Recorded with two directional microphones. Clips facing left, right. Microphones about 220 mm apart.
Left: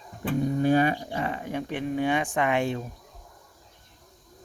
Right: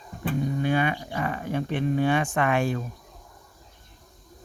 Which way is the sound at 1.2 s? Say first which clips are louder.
Right 5 dB; 20° left (ahead or behind).